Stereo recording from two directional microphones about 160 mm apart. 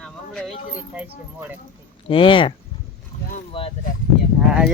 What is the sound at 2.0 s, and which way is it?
Speech, 30° left (ahead or behind).